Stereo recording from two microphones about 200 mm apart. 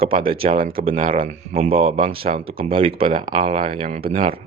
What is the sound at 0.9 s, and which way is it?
Speech, 40° right (ahead or behind).